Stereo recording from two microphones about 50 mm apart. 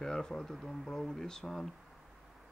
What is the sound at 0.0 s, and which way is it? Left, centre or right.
Speech, centre.